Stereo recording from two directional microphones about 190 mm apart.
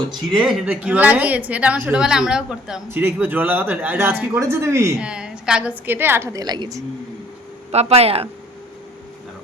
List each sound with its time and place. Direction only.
0.1 s a woman's voice: centre (ahead or behind); by 6.8 s 20° right (ahead or behind)
7.7 s speech: 35° right (ahead or behind)